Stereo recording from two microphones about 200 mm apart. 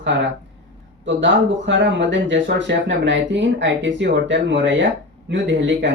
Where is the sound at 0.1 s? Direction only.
60° right (ahead or behind).